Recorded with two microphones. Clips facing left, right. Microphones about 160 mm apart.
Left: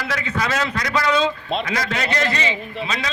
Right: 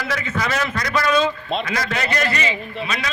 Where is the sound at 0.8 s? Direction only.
15° left (ahead or behind).